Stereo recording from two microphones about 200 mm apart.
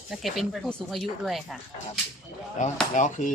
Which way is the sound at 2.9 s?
40° left (ahead or behind).